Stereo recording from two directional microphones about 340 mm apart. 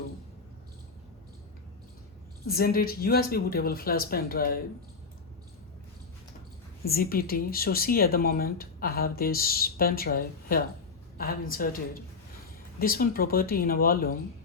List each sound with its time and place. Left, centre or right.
2.5 s speech: left
6.8 s speech: left
12.8 s speech: left